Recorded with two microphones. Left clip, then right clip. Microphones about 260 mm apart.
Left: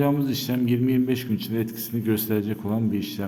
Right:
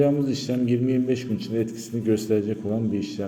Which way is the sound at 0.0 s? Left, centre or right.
Centre.